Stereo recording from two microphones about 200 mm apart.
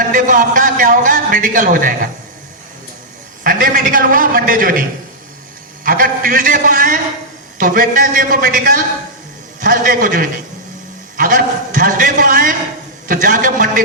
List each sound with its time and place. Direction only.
0.1 s a man's voice: 40° right (ahead or behind)
3.4 s a man's voice: 45° right (ahead or behind)